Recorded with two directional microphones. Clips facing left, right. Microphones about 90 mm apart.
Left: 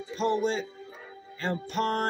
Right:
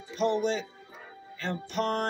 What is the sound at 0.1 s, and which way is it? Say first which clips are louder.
Speech: even; 35° left (ahead or behind).